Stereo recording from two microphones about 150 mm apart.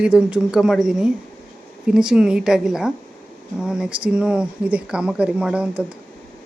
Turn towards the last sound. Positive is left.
turn(degrees=-5)  # may be behind; listen again after turning